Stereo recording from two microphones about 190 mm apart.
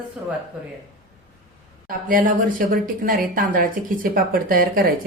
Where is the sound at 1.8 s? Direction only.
45° right (ahead or behind).